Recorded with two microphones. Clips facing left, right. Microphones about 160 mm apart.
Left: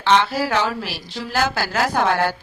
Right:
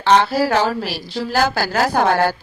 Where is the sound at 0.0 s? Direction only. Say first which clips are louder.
Right 3 dB; 40° right (ahead or behind).